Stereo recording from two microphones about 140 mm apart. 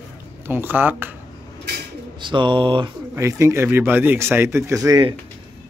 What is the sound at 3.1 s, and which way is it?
Speech, 20° right (ahead or behind).